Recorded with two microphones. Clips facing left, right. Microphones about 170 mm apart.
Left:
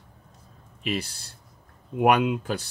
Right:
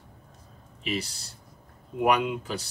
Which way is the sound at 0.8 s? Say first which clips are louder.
Left 2 dB; 55° left (ahead or behind).